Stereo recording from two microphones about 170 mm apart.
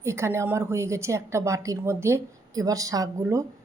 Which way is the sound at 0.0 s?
15° right (ahead or behind).